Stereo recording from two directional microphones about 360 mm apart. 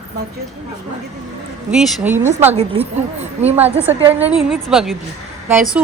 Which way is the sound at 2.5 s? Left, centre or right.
Centre.